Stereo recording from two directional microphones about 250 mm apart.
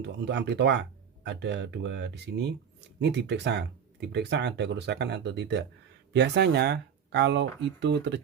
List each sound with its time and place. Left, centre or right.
0.0 s speech: right